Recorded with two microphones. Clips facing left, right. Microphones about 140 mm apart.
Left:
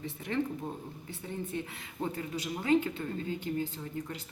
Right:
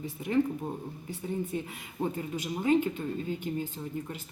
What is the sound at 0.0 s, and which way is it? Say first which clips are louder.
A woman's voice: right 5 dB; 15° right (ahead or behind).